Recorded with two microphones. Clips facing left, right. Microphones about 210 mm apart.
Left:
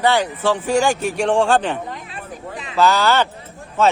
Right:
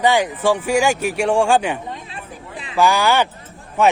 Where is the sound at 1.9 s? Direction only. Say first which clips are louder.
Even; 25° right (ahead or behind).